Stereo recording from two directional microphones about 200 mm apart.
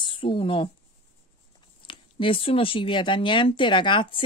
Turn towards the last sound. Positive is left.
turn(degrees=25)  # may be behind; listen again after turning